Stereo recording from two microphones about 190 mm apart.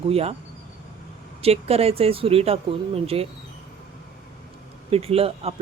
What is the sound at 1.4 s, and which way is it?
Speech, 30° right (ahead or behind).